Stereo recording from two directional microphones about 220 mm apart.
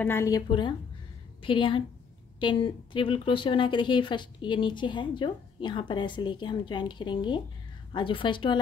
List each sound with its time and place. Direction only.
0.0 s a woman's voice: 10° left (ahead or behind)